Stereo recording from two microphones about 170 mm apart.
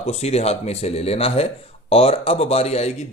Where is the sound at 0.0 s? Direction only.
40° left (ahead or behind).